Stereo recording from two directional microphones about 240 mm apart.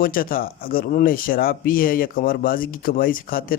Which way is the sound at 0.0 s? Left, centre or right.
Left.